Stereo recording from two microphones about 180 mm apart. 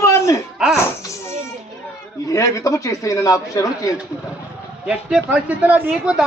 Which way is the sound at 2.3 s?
15° left (ahead or behind).